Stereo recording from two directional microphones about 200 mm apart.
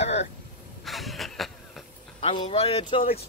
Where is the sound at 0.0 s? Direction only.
35° left (ahead or behind).